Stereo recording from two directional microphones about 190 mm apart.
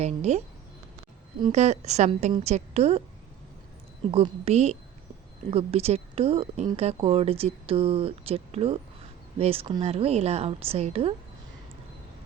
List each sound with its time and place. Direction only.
0.0 s speech: 35° right (ahead or behind)
1.5 s speech: 35° right (ahead or behind)
4.1 s speech: 30° right (ahead or behind)